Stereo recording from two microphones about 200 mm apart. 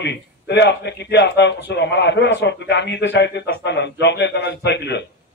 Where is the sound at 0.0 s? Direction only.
60° left (ahead or behind).